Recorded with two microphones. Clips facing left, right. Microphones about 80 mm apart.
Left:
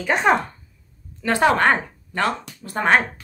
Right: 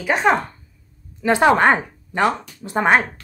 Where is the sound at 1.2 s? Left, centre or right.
Centre.